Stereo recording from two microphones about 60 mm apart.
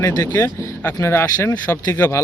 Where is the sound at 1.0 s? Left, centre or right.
Left.